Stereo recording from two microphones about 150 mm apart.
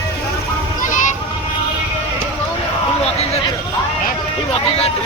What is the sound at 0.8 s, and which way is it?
Children playing, 60° left (ahead or behind).